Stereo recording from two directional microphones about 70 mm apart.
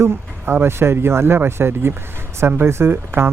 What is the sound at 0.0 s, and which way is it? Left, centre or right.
Speech, right.